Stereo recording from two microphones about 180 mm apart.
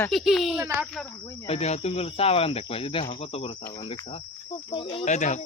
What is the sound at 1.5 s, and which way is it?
Cricket, 35° left (ahead or behind).